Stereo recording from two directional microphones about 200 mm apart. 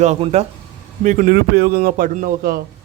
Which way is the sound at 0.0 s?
35° right (ahead or behind).